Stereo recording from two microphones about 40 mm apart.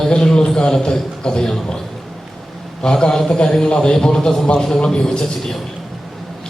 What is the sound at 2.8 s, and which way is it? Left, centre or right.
A man's voice, centre.